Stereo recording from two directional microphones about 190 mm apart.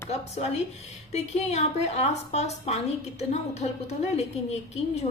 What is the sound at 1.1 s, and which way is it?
A woman's voice, 35° left (ahead or behind).